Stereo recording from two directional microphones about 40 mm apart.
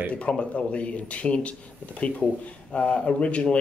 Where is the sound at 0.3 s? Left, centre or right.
Left.